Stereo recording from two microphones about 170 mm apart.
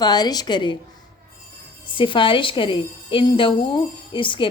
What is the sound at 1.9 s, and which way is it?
A woman's voice, 30° left (ahead or behind).